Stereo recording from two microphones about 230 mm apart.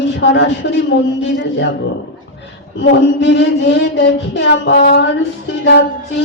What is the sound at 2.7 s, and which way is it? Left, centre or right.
Child singing, left.